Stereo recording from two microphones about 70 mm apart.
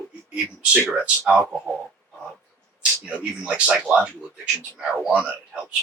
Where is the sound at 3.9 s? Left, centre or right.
Centre.